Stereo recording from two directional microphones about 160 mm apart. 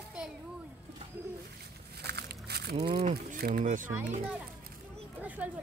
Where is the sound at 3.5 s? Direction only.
55° right (ahead or behind).